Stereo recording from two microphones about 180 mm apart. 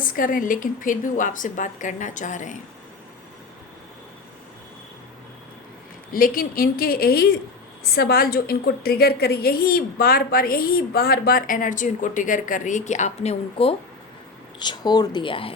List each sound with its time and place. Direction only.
0.0 s a woman's voice: 50° left (ahead or behind)
6.1 s a woman's voice: 50° left (ahead or behind); by 13.7 s 35° left (ahead or behind)
14.6 s speech: 25° left (ahead or behind)